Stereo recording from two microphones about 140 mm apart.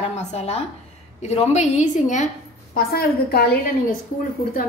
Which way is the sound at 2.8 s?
90° left.